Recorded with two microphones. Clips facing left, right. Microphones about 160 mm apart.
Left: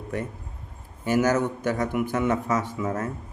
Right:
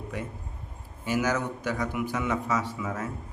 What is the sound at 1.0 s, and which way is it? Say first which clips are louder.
Speech: left 5 dB; 50° left (ahead or behind).